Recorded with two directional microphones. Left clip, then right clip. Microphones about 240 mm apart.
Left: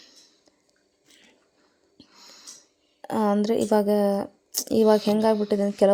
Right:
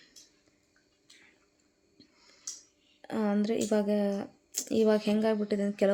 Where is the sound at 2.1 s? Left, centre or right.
Left.